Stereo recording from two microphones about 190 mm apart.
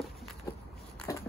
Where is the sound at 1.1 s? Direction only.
20° left (ahead or behind).